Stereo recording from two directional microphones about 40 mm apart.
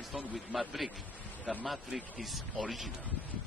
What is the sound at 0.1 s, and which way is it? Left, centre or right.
Speech, right.